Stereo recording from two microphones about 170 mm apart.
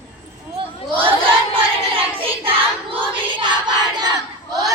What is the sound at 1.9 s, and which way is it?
Child singing, 30° right (ahead or behind).